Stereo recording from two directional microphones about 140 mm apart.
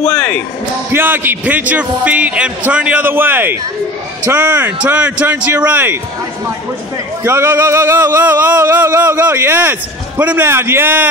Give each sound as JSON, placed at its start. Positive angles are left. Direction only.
{"t": 0.1, "sound": "music", "side_deg": 10}
{"t": 0.9, "sound": "music", "side_deg": -15}
{"t": 7.2, "sound": "music", "side_deg": -15}